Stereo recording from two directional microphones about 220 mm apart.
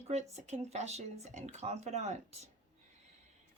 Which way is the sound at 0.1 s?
30° right (ahead or behind).